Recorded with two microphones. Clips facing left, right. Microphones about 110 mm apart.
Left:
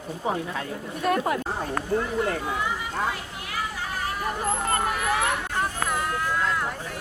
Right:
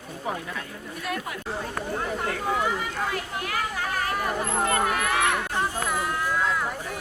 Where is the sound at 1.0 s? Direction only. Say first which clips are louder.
Left 9 dB; 40° left (ahead or behind).